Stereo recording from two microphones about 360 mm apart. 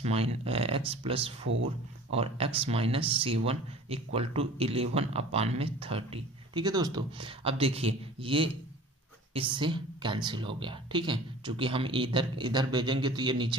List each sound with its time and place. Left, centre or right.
0.0 s speech: centre